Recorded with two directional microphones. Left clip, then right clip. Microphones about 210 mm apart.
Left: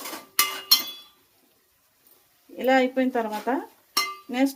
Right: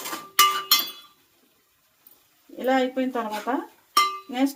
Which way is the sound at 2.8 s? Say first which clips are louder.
Left 2 dB; 25° left (ahead or behind).